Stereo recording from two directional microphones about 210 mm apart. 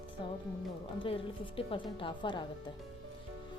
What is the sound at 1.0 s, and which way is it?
A woman's voice, 25° left (ahead or behind).